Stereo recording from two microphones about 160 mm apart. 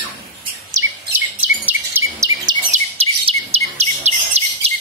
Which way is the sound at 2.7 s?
40° right (ahead or behind).